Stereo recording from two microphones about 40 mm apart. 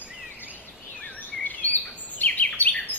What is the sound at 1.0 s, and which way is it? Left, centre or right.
Bird vocalization, left.